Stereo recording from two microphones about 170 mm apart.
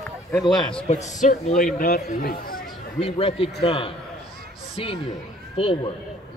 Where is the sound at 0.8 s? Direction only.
45° left (ahead or behind).